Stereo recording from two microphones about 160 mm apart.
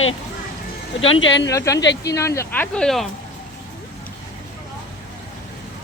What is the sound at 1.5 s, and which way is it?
Speech, 20° left (ahead or behind).